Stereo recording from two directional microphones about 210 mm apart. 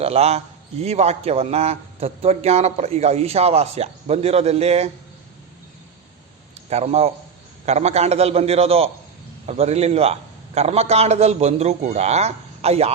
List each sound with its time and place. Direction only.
0.0 s a man's voice: 30° right (ahead or behind)
6.7 s a man's voice: 30° right (ahead or behind)